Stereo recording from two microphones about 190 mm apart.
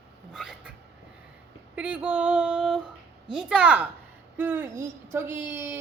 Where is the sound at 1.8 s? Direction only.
5° right (ahead or behind).